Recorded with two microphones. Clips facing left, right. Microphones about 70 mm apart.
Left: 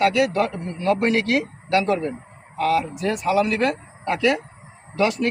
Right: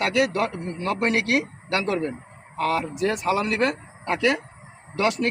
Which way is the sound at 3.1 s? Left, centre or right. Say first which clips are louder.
Left 5 dB; right.